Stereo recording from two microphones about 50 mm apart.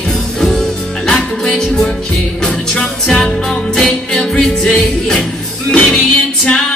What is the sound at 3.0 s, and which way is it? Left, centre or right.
Music, centre.